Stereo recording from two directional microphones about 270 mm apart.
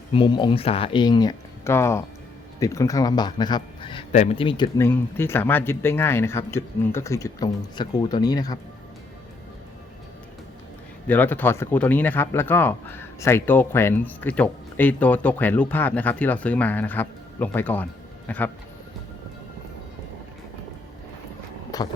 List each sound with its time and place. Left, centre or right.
0.1 s speech: centre
11.1 s a man's voice: centre
21.7 s a sound: centre